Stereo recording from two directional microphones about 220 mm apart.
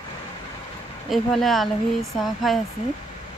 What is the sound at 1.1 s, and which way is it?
Speech, centre (ahead or behind).